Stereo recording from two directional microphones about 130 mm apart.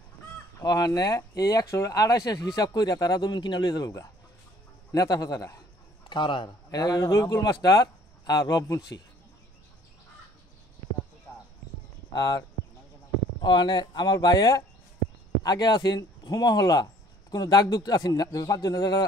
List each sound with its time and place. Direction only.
0.6 s speech: 30° left (ahead or behind)
6.0 s speech: 40° left (ahead or behind)
12.1 s speech: 30° left (ahead or behind)